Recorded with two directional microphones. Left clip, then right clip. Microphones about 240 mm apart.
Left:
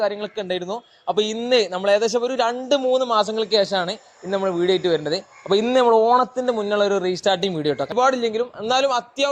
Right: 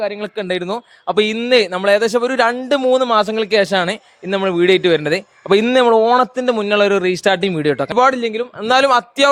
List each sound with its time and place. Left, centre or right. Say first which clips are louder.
0.0 s a man's voice: right 2 dB; right